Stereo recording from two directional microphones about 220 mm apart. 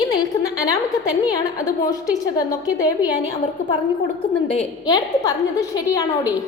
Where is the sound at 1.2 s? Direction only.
15° left (ahead or behind).